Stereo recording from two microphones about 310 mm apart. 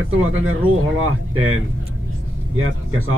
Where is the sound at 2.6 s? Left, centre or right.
Right.